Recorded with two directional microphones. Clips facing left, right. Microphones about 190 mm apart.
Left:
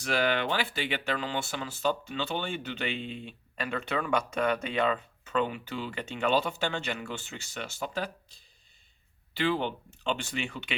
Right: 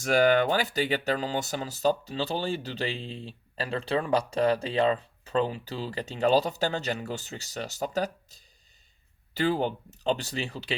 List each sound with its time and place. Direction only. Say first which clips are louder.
0.0 s speech: right 6 dB; 45° right (ahead or behind)